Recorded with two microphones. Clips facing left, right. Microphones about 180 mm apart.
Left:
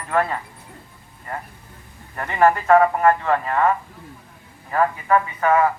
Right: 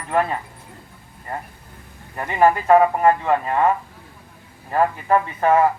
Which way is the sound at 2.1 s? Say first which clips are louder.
Right 1 dB; 15° right (ahead or behind).